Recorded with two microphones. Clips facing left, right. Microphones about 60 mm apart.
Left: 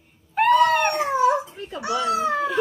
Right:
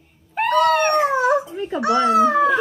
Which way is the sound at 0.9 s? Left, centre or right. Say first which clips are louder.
Right 5 dB; right.